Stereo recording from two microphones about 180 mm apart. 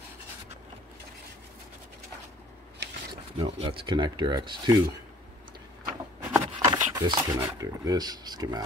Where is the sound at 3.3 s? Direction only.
30° right (ahead or behind).